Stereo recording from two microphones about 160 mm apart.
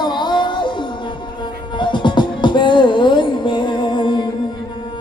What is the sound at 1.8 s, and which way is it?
Music, 30° left (ahead or behind).